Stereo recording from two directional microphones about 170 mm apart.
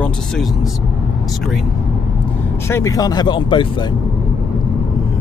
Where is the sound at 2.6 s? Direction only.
15° left (ahead or behind).